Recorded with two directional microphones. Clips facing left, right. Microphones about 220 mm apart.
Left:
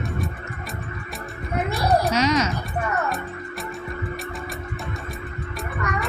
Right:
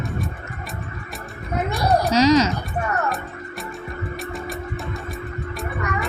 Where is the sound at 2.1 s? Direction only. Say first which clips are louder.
Right 5 dB; 35° right (ahead or behind).